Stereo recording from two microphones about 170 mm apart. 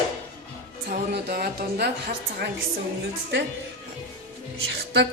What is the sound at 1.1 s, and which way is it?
Speech, 65° right (ahead or behind).